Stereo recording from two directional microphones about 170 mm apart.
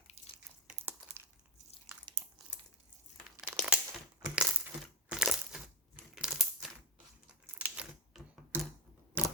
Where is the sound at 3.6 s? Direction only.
5° right (ahead or behind).